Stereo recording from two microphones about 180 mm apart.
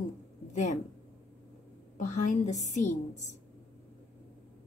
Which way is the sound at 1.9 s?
45° left (ahead or behind).